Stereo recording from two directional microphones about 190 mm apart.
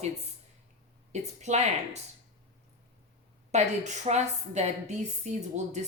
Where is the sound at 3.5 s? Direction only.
35° right (ahead or behind).